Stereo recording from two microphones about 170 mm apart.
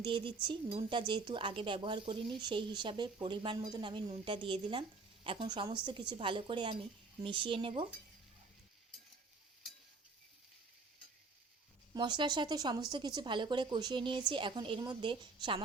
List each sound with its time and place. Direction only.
0.0 s speech: 30° right (ahead or behind)
11.9 s speech: 25° right (ahead or behind)